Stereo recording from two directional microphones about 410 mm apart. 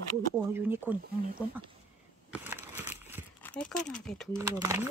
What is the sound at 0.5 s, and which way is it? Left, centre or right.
Speech, centre.